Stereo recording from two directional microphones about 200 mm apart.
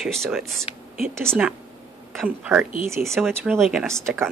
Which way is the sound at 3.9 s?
10° right (ahead or behind).